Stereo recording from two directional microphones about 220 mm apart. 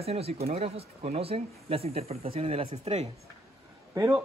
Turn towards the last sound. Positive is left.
turn(degrees=-15)  # may be behind; listen again after turning